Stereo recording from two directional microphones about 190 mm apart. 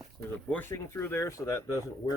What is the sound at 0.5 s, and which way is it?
Speech, 10° left (ahead or behind).